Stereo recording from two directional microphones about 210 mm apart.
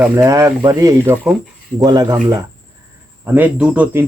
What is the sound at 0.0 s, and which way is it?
Speech, 15° right (ahead or behind).